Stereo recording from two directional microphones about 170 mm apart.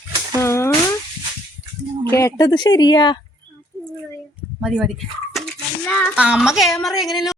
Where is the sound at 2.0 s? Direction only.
20° left (ahead or behind).